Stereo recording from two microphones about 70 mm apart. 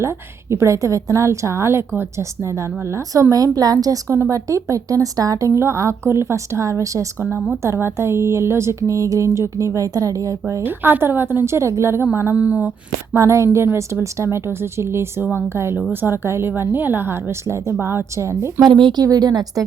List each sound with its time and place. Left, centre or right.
0.5 s speech: right
3.2 s a woman's voice: right
4.3 s speech: right
5.5 s speech: right
7.3 s a woman's voice: centre
7.6 s speech: right
10.6 s a woman's voice: right
12.4 s speech: centre
13.1 s a woman's voice: right
18.8 s a woman's voice: right
19.0 s a woman's voice: right